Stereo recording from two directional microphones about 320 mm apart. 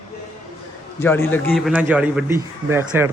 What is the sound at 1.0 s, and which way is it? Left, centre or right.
A man's voice, centre.